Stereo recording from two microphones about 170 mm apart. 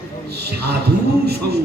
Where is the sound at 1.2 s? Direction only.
70° right (ahead or behind).